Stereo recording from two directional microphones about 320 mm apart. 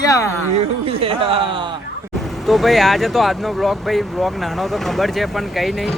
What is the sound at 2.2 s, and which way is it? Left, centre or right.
Speech, centre.